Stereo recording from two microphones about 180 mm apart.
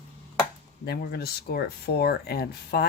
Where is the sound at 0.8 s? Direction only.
65° left (ahead or behind).